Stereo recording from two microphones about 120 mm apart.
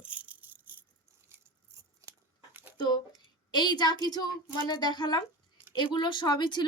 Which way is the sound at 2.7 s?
35° left (ahead or behind).